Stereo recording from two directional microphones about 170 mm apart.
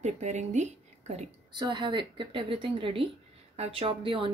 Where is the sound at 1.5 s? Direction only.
25° right (ahead or behind).